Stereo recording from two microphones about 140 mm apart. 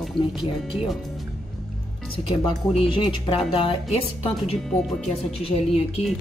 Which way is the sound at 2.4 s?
40° left (ahead or behind).